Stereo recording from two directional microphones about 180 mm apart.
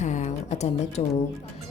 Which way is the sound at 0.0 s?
40° left (ahead or behind).